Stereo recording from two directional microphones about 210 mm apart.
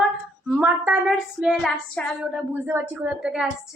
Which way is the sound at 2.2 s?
10° right (ahead or behind).